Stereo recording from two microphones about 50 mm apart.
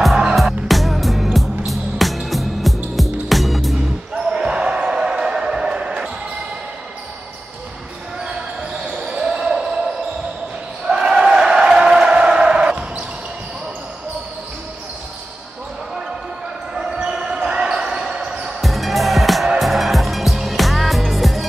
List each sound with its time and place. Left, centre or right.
0.3 s music: centre
4.5 s a sound: right
8.8 s basketball bounce: centre
10.9 s a sound: centre
16.7 s basketball bounce: centre
18.6 s music: centre